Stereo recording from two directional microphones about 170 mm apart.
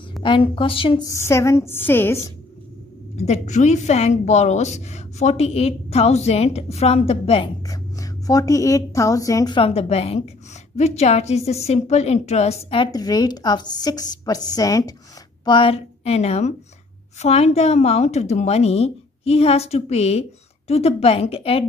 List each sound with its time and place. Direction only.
0.2 s a woman's voice: 30° left (ahead or behind); by 2.3 s 15° left (ahead or behind)
3.2 s a woman's voice: 40° left (ahead or behind)
7.6 s a woman's voice: 20° left (ahead or behind)